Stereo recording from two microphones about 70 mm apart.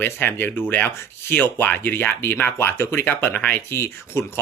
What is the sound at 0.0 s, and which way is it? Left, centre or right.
Speech, left.